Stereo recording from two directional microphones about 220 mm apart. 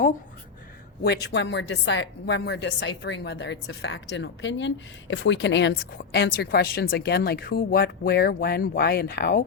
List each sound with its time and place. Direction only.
1.0 s a woman's voice: 50° left (ahead or behind)